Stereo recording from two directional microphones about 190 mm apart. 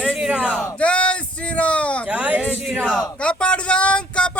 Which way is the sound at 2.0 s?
5° right (ahead or behind).